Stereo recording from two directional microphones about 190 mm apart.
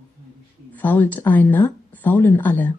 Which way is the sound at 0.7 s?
10° left (ahead or behind).